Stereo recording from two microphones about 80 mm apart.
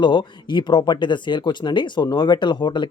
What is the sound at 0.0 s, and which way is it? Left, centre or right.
Speech, left.